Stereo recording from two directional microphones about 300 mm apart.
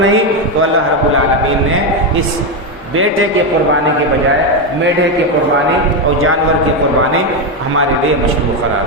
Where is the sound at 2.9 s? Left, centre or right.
Right.